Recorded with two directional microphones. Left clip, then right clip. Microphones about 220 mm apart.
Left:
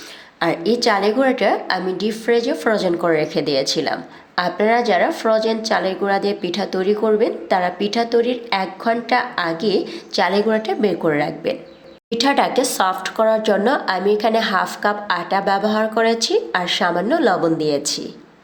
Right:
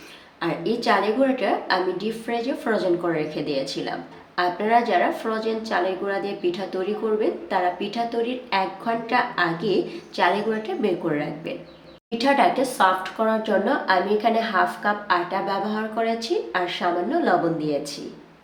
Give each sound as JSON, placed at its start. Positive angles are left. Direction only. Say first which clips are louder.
{"t": 0.3, "sound": "a woman's voice", "louder": "left 7 dB", "side_deg": 50}